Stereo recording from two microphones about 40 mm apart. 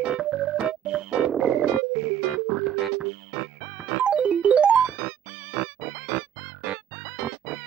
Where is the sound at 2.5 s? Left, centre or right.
Right.